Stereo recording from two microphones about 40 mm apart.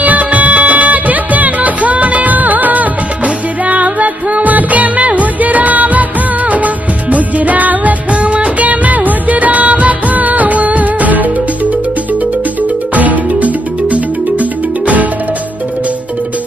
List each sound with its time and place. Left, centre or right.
0.0 s music: right
8.1 s music: right
12.9 s music: right